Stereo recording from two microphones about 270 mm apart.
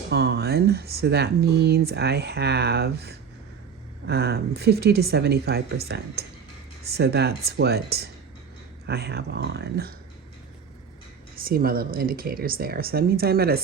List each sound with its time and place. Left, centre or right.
0.1 s speech: right
6.8 s speech: right
11.3 s speech: right